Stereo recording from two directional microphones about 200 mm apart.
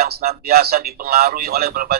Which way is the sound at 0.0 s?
50° right (ahead or behind).